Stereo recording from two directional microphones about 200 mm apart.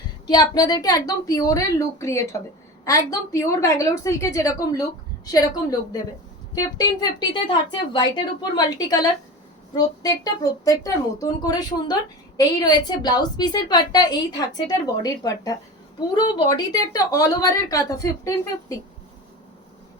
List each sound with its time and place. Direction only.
0.3 s a woman's voice: 20° left (ahead or behind)
6.5 s a woman's voice: 20° left (ahead or behind)